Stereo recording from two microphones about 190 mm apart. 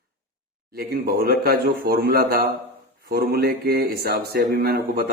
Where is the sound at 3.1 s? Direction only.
55° right (ahead or behind).